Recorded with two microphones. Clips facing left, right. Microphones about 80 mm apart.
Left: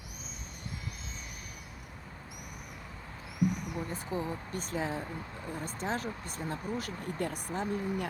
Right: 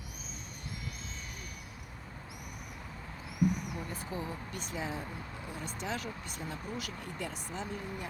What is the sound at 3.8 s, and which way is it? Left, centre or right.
Speech, left.